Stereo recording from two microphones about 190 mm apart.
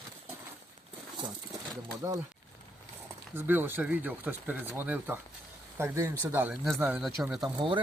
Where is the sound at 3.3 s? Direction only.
10° right (ahead or behind).